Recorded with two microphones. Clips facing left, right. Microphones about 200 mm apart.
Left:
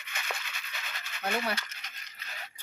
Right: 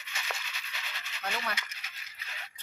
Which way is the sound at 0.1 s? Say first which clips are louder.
Left 1 dB; 55° left (ahead or behind).